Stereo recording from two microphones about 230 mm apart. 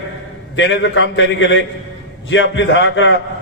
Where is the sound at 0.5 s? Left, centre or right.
Left.